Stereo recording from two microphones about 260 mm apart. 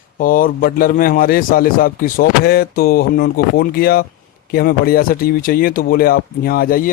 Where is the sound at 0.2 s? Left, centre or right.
Left.